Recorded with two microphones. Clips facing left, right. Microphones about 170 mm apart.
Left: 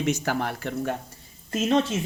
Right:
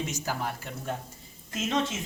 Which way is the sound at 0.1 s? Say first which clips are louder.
Left 7 dB; 70° left (ahead or behind).